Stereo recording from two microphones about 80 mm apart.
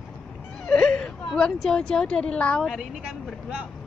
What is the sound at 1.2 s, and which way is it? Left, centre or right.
Speech, centre.